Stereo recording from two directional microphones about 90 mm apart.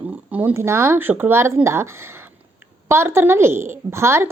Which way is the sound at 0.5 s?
30° right (ahead or behind).